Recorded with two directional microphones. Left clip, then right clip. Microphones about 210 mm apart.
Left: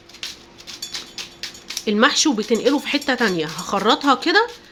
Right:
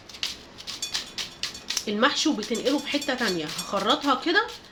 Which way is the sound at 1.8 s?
50° left (ahead or behind).